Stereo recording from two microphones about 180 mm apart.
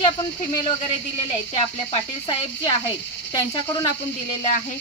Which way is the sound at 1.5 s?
30° left (ahead or behind).